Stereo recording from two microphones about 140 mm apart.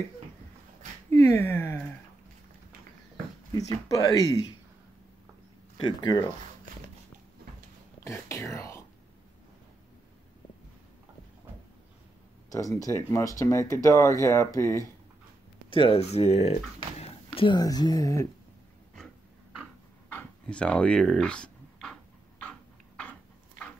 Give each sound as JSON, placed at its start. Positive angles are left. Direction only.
{"t": 1.1, "sound": "speech", "side_deg": 20}
{"t": 3.5, "sound": "speech", "side_deg": 25}
{"t": 5.8, "sound": "speech", "side_deg": 30}
{"t": 8.0, "sound": "whispering", "side_deg": 20}
{"t": 12.4, "sound": "a sound", "side_deg": 25}
{"t": 12.8, "sound": "speech", "side_deg": 25}
{"t": 15.7, "sound": "speech", "side_deg": 40}
{"t": 17.5, "sound": "speech", "side_deg": 30}
{"t": 20.1, "sound": "dog", "side_deg": 10}
{"t": 22.4, "sound": "a sound", "side_deg": 10}